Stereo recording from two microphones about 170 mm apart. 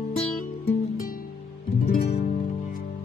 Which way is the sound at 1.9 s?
60° left (ahead or behind).